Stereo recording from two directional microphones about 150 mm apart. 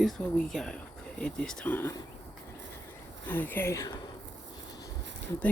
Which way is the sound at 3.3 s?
15° left (ahead or behind).